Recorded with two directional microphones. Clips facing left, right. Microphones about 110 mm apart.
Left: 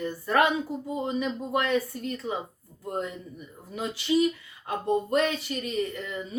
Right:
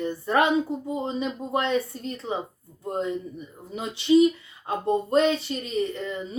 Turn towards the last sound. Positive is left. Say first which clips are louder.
# right 3 dB
turn(degrees=-25)  # may be behind; listen again after turning